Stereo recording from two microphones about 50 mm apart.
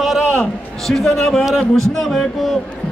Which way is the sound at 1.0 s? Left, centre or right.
Centre.